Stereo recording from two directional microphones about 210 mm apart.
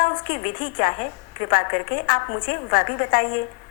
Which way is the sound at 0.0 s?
40° left (ahead or behind).